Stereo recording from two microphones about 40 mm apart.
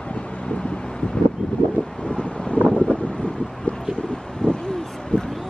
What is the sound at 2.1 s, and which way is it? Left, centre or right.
Wind noise, left.